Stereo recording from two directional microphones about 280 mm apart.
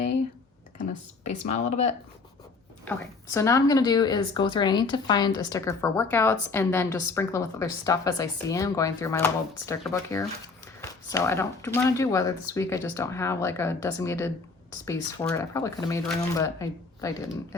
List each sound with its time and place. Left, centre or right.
0.8 s speech: left
3.3 s a woman's voice: centre